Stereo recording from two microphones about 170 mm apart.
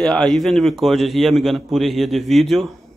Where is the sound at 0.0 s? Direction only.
5° left (ahead or behind).